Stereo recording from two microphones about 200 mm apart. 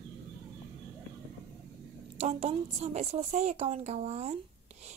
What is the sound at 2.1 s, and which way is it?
A woman's voice, 35° right (ahead or behind).